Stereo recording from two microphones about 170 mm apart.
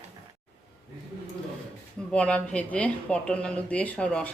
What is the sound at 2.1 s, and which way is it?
Speech, 5° left (ahead or behind).